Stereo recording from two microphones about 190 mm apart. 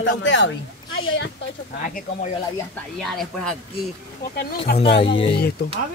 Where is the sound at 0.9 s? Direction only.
85° left.